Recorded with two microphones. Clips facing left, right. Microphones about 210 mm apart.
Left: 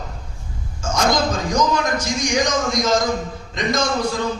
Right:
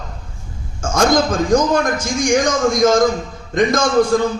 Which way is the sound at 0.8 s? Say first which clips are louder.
Right 4 dB; 50° right (ahead or behind).